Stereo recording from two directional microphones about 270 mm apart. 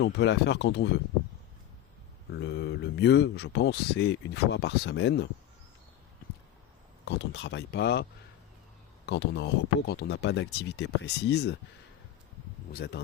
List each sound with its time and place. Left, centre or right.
0.0 s speech: left
2.3 s speech: left
7.0 s speech: left
9.0 s speech: left
12.7 s speech: left